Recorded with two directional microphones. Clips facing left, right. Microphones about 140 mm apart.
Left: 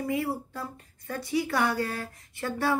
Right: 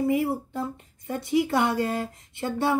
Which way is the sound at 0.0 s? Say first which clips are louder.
Right 5 dB; 20° right (ahead or behind).